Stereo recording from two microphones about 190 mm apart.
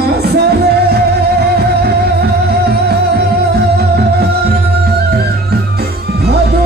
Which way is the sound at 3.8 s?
55° right (ahead or behind).